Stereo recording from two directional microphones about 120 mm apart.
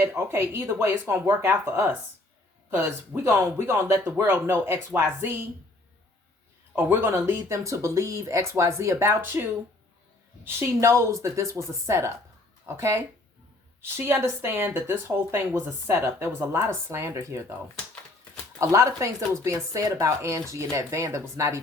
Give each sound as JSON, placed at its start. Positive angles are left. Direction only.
{"t": 0.0, "sound": "speech", "side_deg": -20}
{"t": 6.7, "sound": "speech", "side_deg": -15}
{"t": 18.6, "sound": "speech", "side_deg": -25}